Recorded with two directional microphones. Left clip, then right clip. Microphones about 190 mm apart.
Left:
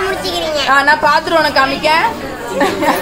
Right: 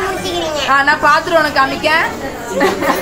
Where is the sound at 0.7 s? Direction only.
55° left (ahead or behind).